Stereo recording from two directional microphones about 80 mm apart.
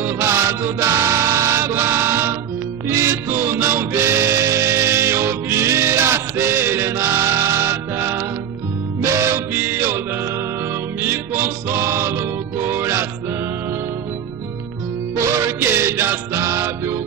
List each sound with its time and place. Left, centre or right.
0.0 s music: right
15.1 s music: right